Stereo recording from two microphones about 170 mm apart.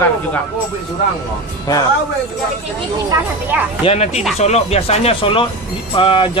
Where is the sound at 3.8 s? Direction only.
40° left (ahead or behind).